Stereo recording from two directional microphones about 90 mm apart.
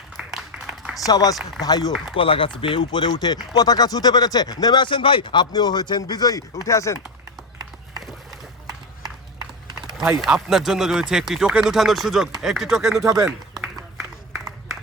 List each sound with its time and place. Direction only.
0.2 s a sound: 5° right (ahead or behind)
1.0 s speech: 40° left (ahead or behind)
2.1 s speech: 75° left (ahead or behind); by 5.5 s 60° left (ahead or behind)
5.5 s speech: 50° left (ahead or behind)
10.2 s speech: 5° right (ahead or behind)
13.6 s a sound: 5° right (ahead or behind)